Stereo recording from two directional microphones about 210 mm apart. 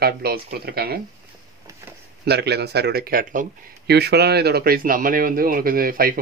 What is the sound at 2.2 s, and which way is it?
Speech, 50° right (ahead or behind).